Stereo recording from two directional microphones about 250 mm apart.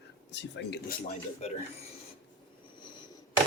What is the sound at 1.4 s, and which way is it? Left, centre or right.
Speech, left.